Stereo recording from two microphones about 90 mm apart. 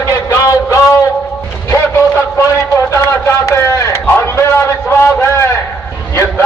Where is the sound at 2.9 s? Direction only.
35° left (ahead or behind).